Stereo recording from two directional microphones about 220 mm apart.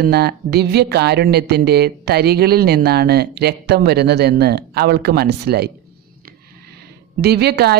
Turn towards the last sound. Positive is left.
turn(degrees=-45)  # may be behind; listen again after turning